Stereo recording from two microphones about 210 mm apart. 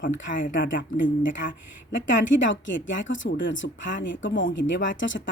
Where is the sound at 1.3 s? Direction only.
40° left (ahead or behind).